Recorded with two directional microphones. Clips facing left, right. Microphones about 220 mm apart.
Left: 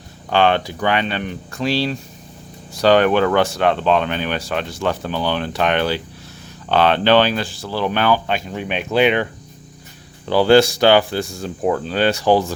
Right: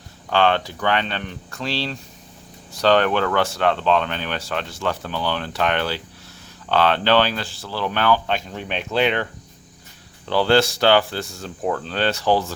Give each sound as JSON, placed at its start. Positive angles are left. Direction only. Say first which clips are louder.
{"t": 0.3, "sound": "speech", "louder": "left 3 dB", "side_deg": 15}
{"t": 10.2, "sound": "speech", "louder": "left 5 dB", "side_deg": 15}